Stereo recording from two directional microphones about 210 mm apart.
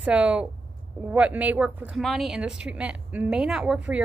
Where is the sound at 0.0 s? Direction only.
5° right (ahead or behind).